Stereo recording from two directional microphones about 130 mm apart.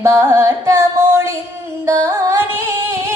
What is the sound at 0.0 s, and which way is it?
Music, 20° right (ahead or behind).